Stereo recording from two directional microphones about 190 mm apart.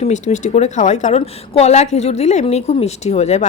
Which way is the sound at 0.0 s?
35° left (ahead or behind).